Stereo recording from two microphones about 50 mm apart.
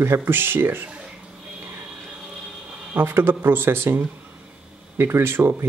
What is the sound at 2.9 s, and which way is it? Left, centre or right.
Speech, right.